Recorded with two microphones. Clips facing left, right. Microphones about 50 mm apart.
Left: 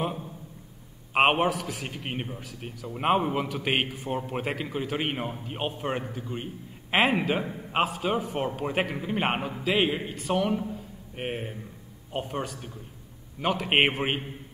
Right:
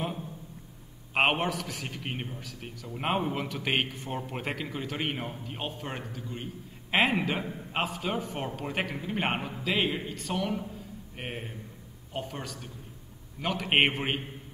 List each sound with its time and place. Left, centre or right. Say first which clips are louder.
1.1 s a man's voice: left 4 dB; centre
6.9 s a man's voice: left 2 dB; centre
9.9 s a man's voice: left 5 dB; left; by 14.1 s centre